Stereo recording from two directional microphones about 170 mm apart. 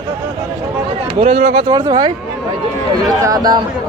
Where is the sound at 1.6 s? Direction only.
25° right (ahead or behind).